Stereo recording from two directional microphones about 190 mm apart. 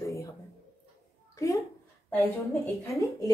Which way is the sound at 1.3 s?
15° left (ahead or behind).